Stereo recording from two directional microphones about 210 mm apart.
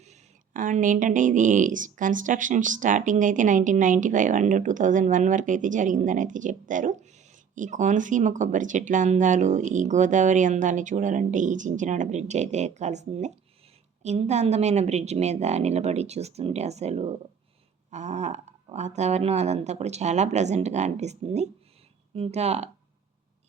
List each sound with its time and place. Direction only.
0.0 s speech: 35° right (ahead or behind)